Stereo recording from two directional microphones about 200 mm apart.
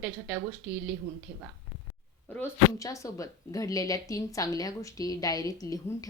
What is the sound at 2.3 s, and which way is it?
Speech, 15° left (ahead or behind).